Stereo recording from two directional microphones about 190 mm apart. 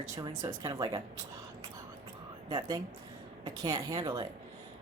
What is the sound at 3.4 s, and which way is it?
Speech, 20° right (ahead or behind).